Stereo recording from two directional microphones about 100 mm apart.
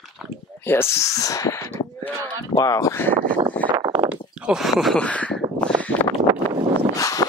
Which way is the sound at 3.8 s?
45° right (ahead or behind).